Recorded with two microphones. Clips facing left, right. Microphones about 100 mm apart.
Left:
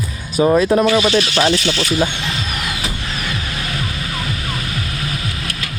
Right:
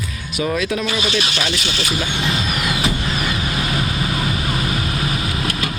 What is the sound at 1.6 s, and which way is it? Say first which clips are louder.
Speech: left 5 dB; 15° right (ahead or behind).